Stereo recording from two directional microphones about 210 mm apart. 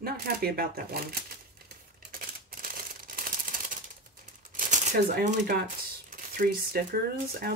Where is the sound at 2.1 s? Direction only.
45° right (ahead or behind).